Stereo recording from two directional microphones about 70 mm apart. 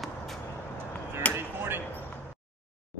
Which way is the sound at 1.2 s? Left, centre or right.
Centre.